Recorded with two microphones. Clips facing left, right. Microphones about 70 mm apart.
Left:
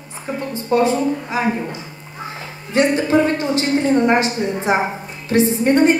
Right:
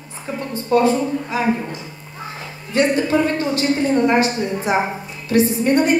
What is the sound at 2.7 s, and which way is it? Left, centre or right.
A woman's voice, left.